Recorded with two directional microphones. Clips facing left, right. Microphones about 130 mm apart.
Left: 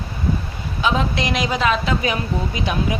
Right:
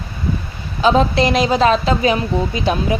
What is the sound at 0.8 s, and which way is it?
A woman's voice, 35° right (ahead or behind).